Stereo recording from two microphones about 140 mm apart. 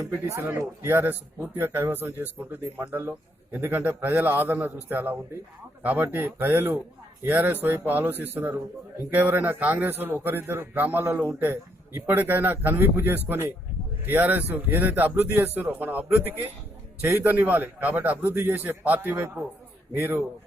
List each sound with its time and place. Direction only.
0.0 s a man's voice: 15° right (ahead or behind)